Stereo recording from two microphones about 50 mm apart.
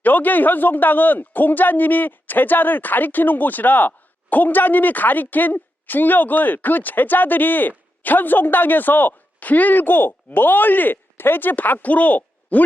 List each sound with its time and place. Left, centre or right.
0.0 s speech: left